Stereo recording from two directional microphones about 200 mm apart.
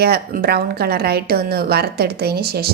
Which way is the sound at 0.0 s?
50° right (ahead or behind).